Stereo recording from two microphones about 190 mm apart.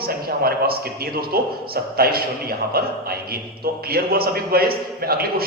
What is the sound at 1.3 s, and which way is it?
Speech, 55° right (ahead or behind).